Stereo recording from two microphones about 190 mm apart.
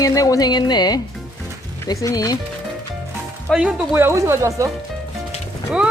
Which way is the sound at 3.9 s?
15° right (ahead or behind).